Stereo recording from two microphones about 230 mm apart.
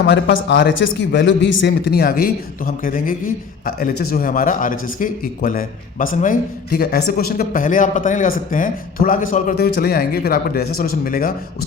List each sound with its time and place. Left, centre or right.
0.1 s a man's voice: left